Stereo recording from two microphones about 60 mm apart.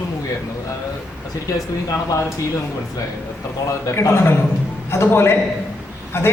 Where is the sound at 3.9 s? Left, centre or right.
Left.